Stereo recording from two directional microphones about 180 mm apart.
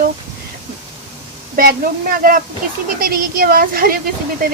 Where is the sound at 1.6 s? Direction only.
55° right (ahead or behind).